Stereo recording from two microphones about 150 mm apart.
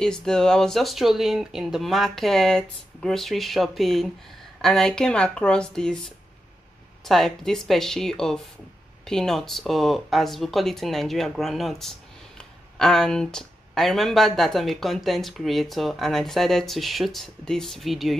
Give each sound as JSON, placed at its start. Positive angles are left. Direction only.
{"t": 0.0, "sound": "speech", "side_deg": 5}